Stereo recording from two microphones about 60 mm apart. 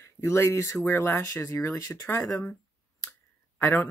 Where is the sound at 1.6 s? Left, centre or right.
Left.